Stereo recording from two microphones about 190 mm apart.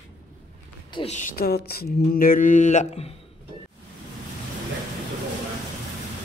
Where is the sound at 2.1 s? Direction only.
50° left (ahead or behind).